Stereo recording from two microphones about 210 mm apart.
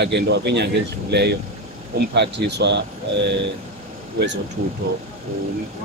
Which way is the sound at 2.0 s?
55° right (ahead or behind).